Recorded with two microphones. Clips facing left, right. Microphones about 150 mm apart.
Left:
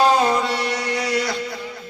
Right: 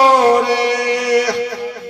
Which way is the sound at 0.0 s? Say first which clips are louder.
Right 6 dB; 80° right.